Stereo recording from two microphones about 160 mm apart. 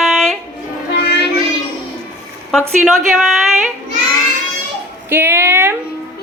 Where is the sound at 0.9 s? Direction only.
90° left.